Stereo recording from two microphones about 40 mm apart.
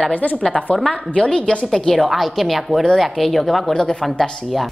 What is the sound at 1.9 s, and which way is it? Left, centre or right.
A woman's voice, centre.